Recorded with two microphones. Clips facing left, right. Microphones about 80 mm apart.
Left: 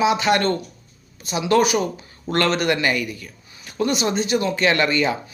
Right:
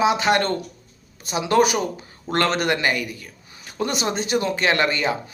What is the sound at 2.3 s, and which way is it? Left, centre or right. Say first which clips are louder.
Speech: left 1 dB; centre.